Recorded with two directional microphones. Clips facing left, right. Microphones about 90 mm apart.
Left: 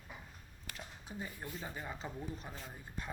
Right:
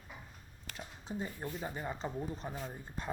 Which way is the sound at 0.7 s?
30° right (ahead or behind).